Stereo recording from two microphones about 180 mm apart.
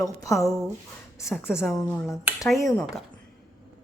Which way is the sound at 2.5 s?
15° left (ahead or behind).